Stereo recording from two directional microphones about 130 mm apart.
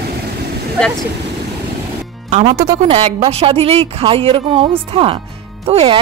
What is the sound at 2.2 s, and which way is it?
Speech, 60° right (ahead or behind).